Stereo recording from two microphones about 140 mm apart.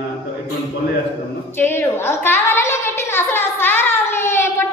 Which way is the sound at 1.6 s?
15° left (ahead or behind).